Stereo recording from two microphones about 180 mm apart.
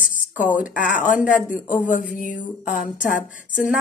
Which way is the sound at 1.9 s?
45° left (ahead or behind).